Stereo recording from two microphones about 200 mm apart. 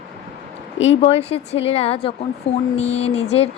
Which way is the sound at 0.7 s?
70° left (ahead or behind).